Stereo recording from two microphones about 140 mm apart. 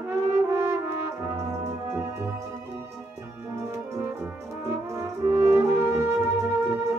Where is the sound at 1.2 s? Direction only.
20° right (ahead or behind).